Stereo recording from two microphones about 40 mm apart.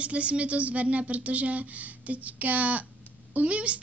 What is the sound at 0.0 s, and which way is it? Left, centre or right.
A woman's voice, right.